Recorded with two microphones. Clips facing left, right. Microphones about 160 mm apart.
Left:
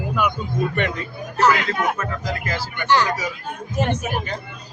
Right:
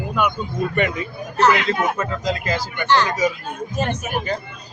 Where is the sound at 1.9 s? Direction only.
20° right (ahead or behind).